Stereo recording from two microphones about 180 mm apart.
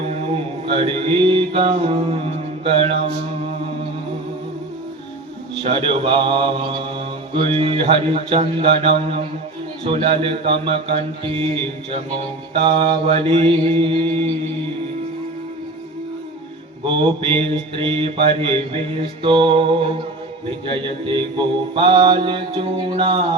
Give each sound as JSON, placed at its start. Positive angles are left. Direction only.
{"t": 0.8, "sound": "mantra", "side_deg": -30}
{"t": 5.6, "sound": "mantra", "side_deg": -30}
{"t": 16.8, "sound": "mantra", "side_deg": -30}
{"t": 20.7, "sound": "mantra", "side_deg": -30}